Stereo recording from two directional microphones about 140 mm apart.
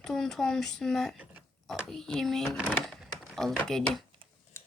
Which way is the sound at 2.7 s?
Centre (ahead or behind).